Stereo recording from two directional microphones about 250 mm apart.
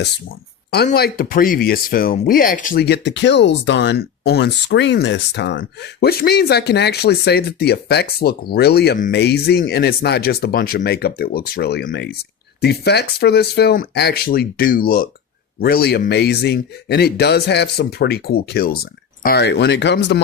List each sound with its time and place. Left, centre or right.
0.7 s speech: left